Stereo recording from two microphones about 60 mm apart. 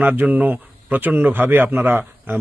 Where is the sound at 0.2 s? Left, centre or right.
Right.